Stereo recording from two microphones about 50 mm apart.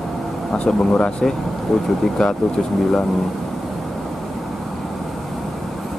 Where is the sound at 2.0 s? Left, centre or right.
Centre.